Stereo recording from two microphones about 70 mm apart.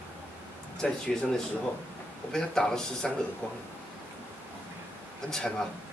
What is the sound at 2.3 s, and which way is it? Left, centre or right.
Speech, centre.